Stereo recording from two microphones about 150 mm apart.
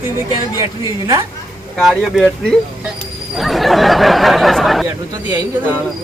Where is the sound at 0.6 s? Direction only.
20° right (ahead or behind).